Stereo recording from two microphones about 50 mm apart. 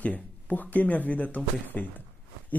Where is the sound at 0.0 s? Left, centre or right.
Left.